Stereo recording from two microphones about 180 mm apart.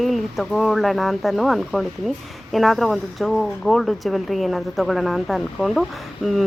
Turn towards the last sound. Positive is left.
turn(degrees=0)  # may be behind; listen again after turning